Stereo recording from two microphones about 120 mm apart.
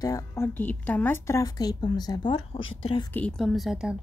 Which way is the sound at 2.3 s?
50° left (ahead or behind).